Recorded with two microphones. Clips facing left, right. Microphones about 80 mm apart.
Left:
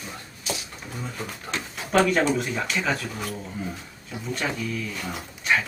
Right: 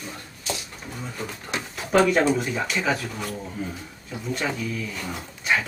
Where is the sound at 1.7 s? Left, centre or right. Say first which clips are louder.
Right 2 dB; centre.